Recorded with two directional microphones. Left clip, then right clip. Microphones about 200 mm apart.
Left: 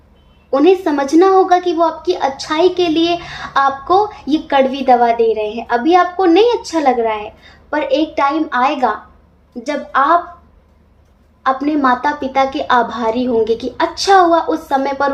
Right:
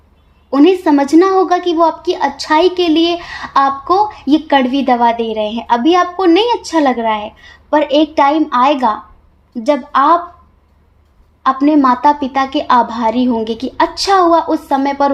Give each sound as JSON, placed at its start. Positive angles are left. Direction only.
{"t": 0.5, "sound": "a woman's voice", "side_deg": -40}
{"t": 11.6, "sound": "a woman's voice", "side_deg": -40}